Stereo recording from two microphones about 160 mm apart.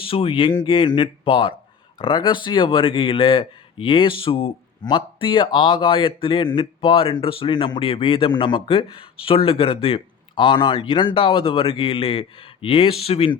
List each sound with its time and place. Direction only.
0.0 s speech: 35° left (ahead or behind)